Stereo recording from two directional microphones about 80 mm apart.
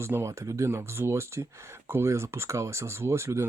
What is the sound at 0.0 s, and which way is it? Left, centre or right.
Speech, right.